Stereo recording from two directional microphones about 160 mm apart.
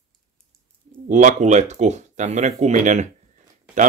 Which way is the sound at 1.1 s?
50° right (ahead or behind).